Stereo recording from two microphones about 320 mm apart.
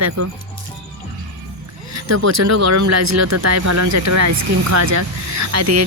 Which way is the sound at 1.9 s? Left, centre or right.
Right.